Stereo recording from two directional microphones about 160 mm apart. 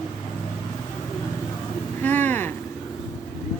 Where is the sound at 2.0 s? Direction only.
10° left (ahead or behind).